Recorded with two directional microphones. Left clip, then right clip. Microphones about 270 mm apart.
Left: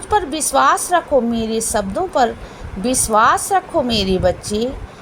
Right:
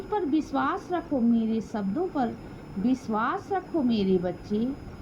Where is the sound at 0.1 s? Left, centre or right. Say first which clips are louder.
Left 11 dB; right.